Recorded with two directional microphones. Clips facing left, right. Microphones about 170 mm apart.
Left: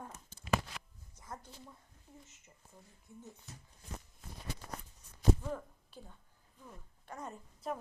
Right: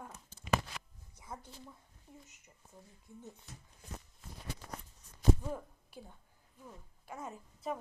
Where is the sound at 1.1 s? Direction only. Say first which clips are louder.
Right 1 dB; 10° right (ahead or behind).